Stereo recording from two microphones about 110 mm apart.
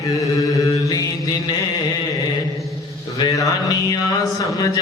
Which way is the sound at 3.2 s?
35° left (ahead or behind).